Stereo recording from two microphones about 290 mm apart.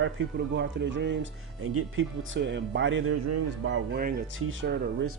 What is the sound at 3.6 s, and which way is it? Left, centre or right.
Speech, right.